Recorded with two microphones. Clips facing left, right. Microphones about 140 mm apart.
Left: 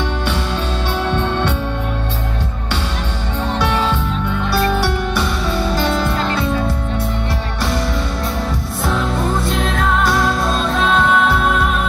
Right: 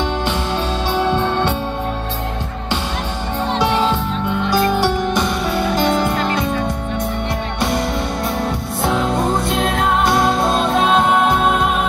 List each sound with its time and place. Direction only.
0.9 s music: 10° right (ahead or behind)
3.5 s music: 10° right (ahead or behind)
8.8 s music: 20° right (ahead or behind)